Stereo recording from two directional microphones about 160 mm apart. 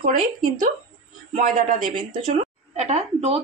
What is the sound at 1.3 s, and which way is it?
Speech, 55° right (ahead or behind).